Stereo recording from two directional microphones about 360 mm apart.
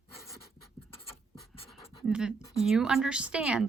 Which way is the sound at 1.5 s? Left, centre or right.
Centre.